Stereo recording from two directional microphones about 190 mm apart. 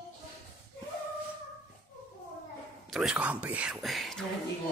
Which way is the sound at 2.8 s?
Centre (ahead or behind).